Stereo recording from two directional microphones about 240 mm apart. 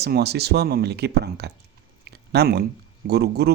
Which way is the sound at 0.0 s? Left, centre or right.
Right.